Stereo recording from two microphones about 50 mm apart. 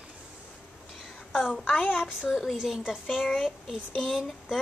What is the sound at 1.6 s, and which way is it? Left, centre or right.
Speech, left.